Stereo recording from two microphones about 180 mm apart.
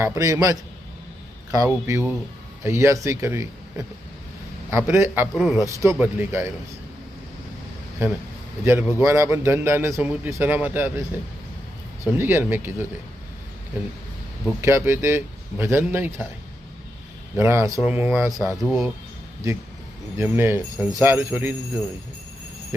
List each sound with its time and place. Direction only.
0.0 s a man's voice: 20° right (ahead or behind)
5.5 s a man's voice: 15° right (ahead or behind)
8.0 s a man's voice: 15° right (ahead or behind)
12.1 s a man's voice: 15° right (ahead or behind)
14.6 s a man's voice: 15° right (ahead or behind)
17.3 s a man's voice: 15° right (ahead or behind)
18.5 s speech: centre (ahead or behind)
20.1 s a man's voice: 15° right (ahead or behind)